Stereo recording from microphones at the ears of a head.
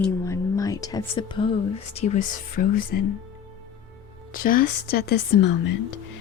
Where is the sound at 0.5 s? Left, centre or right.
Left.